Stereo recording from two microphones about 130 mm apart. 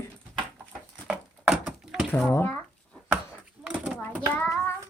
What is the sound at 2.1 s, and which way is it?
Speech, 15° left (ahead or behind).